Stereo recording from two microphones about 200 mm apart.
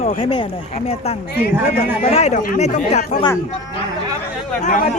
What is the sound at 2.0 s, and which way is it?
Speech, 35° left (ahead or behind).